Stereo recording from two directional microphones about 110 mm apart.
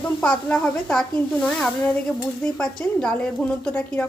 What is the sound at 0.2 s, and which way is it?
A woman's voice, 10° left (ahead or behind).